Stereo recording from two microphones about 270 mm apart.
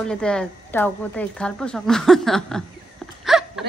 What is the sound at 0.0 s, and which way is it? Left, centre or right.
Speech, centre.